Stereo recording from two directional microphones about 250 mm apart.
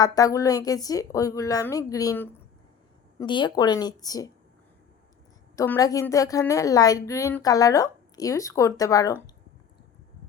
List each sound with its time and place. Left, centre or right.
0.0 s a woman's voice: centre
5.5 s a woman's voice: centre